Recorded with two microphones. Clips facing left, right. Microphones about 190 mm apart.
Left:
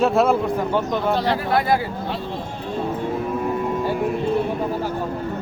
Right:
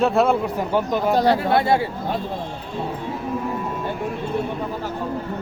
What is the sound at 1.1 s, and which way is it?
Speech, 45° right (ahead or behind).